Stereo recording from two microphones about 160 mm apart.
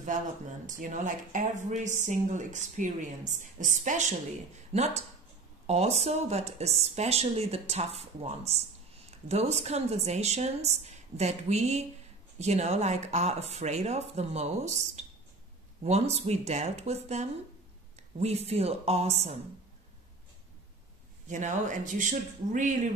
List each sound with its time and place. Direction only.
0.7 s speech: 55° right (ahead or behind)
4.7 s speech: 40° right (ahead or behind)
18.5 s speech: 40° right (ahead or behind)
21.3 s speech: 50° right (ahead or behind)